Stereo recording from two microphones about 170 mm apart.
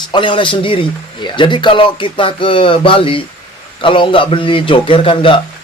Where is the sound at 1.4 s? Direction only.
30° left (ahead or behind).